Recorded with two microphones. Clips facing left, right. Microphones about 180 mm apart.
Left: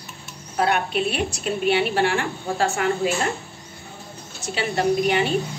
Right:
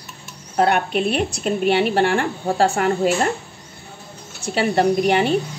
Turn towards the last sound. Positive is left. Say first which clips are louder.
# right 3 dB
turn(degrees=-55)  # may be behind; listen again after turning